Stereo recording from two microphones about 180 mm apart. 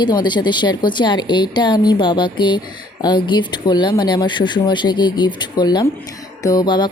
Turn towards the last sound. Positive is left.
turn(degrees=25)  # may be behind; listen again after turning